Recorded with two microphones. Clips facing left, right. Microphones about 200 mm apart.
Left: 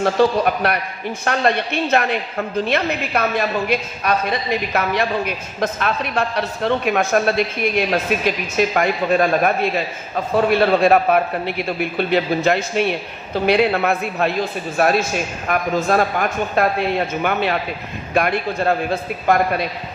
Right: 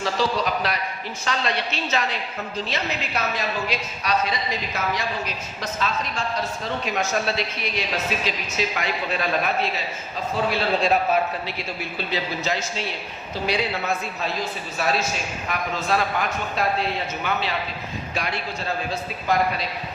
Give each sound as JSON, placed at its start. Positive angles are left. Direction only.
{"t": 0.0, "sound": "a woman's voice", "side_deg": 55}